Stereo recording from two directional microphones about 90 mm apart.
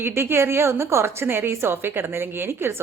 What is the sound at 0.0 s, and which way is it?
A woman's voice, 25° right (ahead or behind).